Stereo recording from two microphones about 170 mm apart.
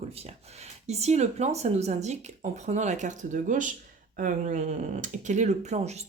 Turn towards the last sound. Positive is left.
turn(degrees=-40)  # may be behind; listen again after turning